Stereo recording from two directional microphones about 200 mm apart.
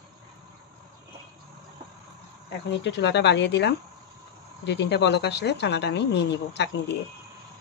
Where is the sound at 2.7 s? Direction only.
60° left (ahead or behind).